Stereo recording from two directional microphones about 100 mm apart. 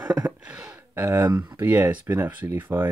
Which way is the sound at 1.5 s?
20° right (ahead or behind).